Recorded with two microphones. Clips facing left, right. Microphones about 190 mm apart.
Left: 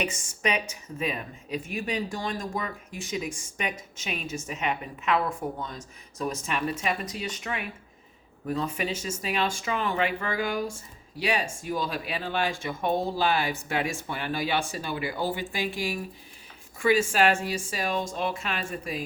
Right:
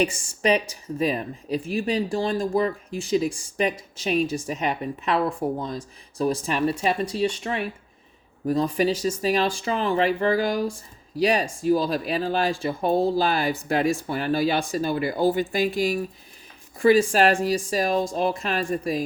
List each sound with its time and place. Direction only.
0.0 s speech: 30° right (ahead or behind)